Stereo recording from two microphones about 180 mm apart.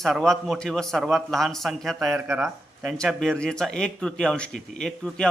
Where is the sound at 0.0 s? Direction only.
Centre (ahead or behind).